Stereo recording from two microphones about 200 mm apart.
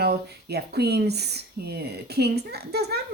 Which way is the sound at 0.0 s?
55° right (ahead or behind).